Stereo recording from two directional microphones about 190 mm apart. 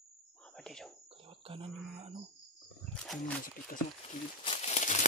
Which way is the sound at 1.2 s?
30° right (ahead or behind).